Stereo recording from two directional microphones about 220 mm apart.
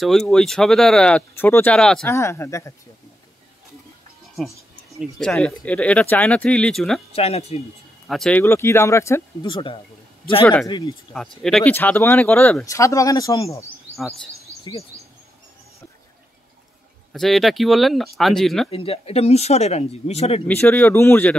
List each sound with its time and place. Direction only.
0.0 s speech: centre (ahead or behind)
4.9 s speech: centre (ahead or behind)
7.2 s speech: 30° left (ahead or behind)
8.1 s speech: 5° left (ahead or behind); by 9.8 s 20° left (ahead or behind)
10.4 s speech: 5° left (ahead or behind)
13.9 s speech: centre (ahead or behind)
14.6 s speech: 20° left (ahead or behind)
17.1 s speech: centre (ahead or behind)
18.7 s speech: 25° left (ahead or behind)
20.4 s speech: 5° left (ahead or behind)